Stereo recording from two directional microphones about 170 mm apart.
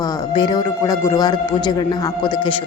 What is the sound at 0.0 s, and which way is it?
A woman's voice, 25° left (ahead or behind).